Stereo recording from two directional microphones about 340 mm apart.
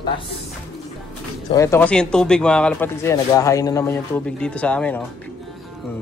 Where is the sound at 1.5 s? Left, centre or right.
Centre.